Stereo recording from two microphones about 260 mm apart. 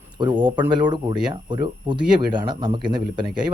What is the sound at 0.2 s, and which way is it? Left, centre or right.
Speech, centre.